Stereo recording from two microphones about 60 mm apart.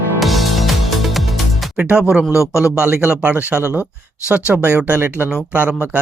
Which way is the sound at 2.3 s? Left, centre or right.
Left.